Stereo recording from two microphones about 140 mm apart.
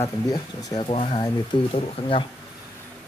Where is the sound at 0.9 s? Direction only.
45° left (ahead or behind).